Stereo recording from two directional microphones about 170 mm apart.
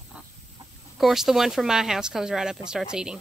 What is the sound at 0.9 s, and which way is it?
Speech, centre (ahead or behind).